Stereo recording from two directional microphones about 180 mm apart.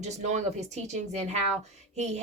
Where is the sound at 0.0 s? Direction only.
40° right (ahead or behind).